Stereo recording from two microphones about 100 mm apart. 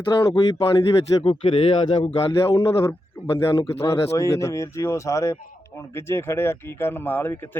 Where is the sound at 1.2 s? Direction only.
70° left (ahead or behind).